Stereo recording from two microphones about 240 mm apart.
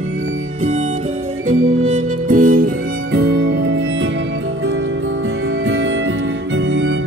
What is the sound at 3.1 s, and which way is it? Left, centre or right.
Music, right.